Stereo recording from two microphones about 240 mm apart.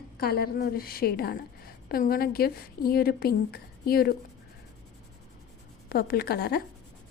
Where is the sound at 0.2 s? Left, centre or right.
Left.